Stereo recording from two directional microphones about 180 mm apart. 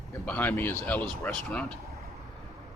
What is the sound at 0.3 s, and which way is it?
Speech, 10° left (ahead or behind).